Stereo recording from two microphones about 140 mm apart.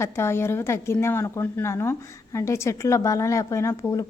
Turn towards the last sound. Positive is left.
turn(degrees=20)  # may be behind; listen again after turning